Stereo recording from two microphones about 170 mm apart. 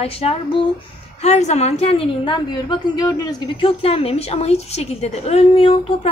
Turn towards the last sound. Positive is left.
turn(degrees=35)  # may be behind; listen again after turning